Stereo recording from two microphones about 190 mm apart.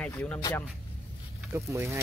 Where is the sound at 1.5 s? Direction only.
15° right (ahead or behind).